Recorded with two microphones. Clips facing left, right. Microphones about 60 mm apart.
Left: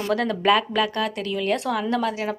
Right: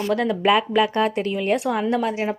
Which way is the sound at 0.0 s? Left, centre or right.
Centre.